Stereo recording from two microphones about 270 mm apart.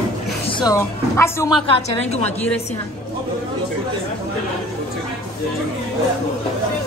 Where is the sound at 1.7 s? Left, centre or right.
Left.